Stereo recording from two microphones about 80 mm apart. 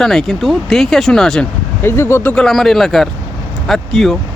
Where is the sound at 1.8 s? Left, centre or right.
Left.